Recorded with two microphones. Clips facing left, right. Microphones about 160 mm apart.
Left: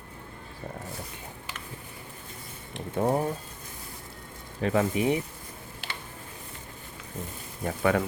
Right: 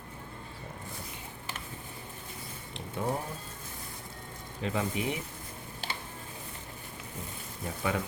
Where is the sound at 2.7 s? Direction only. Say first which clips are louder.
Left 7 dB; 50° left (ahead or behind).